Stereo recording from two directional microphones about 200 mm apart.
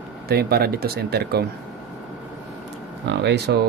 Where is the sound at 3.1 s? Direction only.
55° right (ahead or behind).